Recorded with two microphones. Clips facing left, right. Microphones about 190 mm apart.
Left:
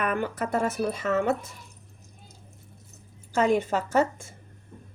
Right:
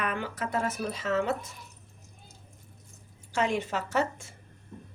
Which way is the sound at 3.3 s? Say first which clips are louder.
Left 6 dB; 45° left (ahead or behind).